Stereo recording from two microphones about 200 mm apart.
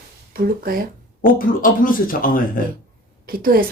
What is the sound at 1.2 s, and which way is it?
Speech, 45° left (ahead or behind).